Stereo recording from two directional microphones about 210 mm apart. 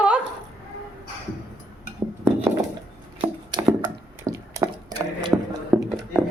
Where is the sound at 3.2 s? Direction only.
20° right (ahead or behind).